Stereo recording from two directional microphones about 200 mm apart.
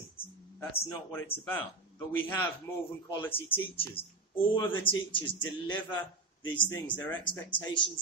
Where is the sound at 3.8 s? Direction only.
25° left (ahead or behind).